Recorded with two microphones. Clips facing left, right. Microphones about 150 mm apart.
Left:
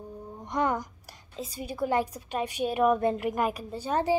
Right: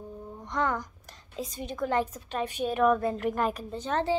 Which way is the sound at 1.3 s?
5° left (ahead or behind).